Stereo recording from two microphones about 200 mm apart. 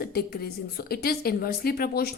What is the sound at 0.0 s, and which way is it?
A woman's voice, 50° left (ahead or behind).